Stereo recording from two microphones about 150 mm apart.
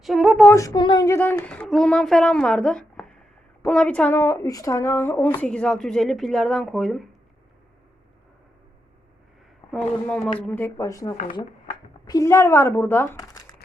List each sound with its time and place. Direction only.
0.0 s a woman's voice: centre (ahead or behind)
0.5 s a woman's voice: 25° left (ahead or behind); by 7.0 s centre (ahead or behind)
9.7 s a woman's voice: 10° left (ahead or behind); by 13.6 s 25° left (ahead or behind)